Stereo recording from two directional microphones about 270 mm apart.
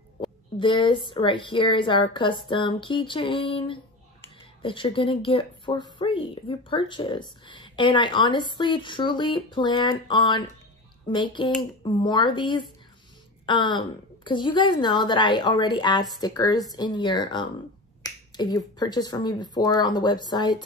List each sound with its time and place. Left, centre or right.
0.6 s a woman's voice: centre